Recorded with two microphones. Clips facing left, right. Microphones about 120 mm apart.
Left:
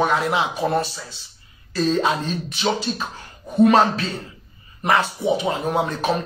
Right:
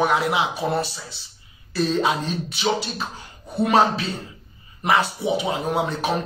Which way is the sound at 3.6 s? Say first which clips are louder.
Left 3 dB; 15° right (ahead or behind).